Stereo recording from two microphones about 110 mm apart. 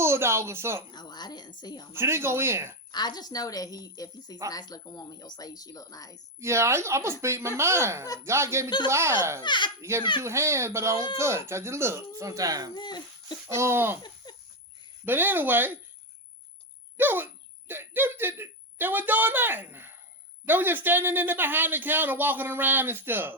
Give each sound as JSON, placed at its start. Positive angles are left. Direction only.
{"t": 0.0, "sound": "speech", "side_deg": -25}
{"t": 0.9, "sound": "a woman's voice", "side_deg": 40}
{"t": 2.0, "sound": "speech", "side_deg": -20}
{"t": 2.9, "sound": "a woman's voice", "side_deg": 40}
{"t": 6.4, "sound": "speech", "side_deg": -25}
{"t": 9.4, "sound": "speech", "side_deg": 45}
{"t": 10.2, "sound": "speech", "side_deg": -25}
{"t": 12.7, "sound": "speech", "side_deg": 40}
{"t": 13.5, "sound": "speech", "side_deg": -25}
{"t": 14.3, "sound": "a sound", "side_deg": 40}
{"t": 15.0, "sound": "a man's voice", "side_deg": -20}
{"t": 17.0, "sound": "a man's voice", "side_deg": -20}